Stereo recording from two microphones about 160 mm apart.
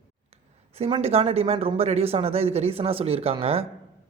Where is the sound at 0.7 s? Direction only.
35° right (ahead or behind).